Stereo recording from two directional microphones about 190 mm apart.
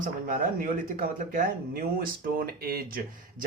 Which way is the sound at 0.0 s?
45° right (ahead or behind).